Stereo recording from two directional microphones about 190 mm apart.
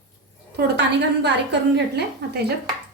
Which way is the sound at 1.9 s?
60° right (ahead or behind).